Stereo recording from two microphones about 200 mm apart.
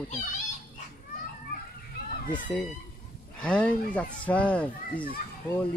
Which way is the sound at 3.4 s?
5° left (ahead or behind).